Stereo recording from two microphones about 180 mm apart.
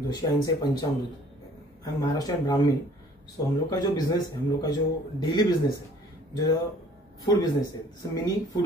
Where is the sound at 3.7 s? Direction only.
20° left (ahead or behind).